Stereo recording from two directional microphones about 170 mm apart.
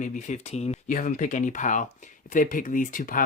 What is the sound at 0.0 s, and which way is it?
Speech, 45° left (ahead or behind).